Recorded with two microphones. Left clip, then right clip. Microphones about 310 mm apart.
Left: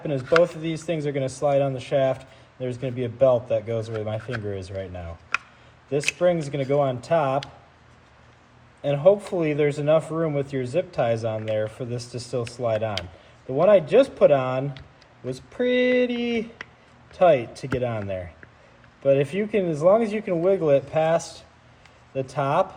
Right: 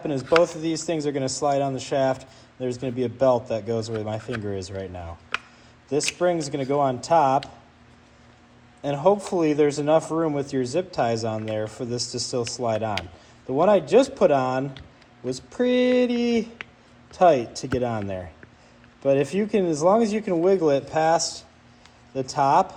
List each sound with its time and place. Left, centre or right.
0.4 s speech: centre
6.2 s speech: centre
8.8 s speech: centre